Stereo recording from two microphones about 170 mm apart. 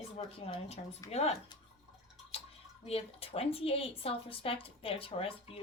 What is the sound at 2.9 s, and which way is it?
Speech, 35° left (ahead or behind).